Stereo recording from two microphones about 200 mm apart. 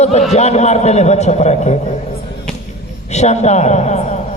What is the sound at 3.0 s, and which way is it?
A man's voice, 35° left (ahead or behind).